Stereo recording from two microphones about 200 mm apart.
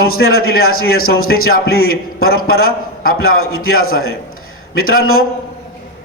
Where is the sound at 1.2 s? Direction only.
90° left.